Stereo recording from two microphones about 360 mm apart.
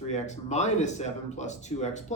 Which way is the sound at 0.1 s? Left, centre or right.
Centre.